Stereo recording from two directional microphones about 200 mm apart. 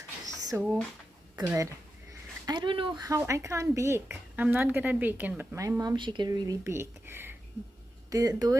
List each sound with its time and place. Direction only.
0.5 s speech: 15° right (ahead or behind)